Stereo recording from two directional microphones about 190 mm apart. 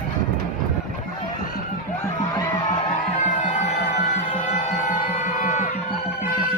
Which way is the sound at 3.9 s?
40° left (ahead or behind).